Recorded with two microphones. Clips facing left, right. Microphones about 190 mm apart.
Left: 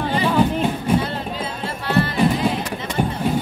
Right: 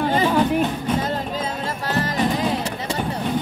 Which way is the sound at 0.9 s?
10° left (ahead or behind).